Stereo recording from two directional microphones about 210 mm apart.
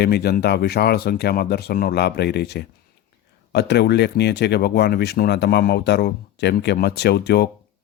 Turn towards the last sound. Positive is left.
turn(degrees=50)  # may be behind; listen again after turning